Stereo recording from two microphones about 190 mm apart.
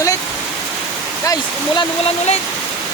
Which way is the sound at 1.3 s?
25° left (ahead or behind).